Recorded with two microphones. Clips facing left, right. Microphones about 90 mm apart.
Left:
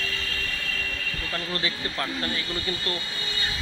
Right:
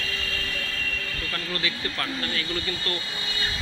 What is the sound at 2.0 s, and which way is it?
Speech, 20° left (ahead or behind).